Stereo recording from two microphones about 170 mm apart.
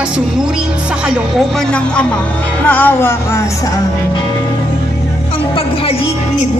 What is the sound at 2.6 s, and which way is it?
Music, 10° left (ahead or behind).